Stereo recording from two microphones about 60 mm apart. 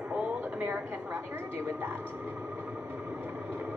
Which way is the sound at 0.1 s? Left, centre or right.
Right.